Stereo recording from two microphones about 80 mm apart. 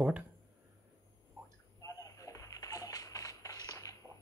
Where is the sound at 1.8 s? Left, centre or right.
Left.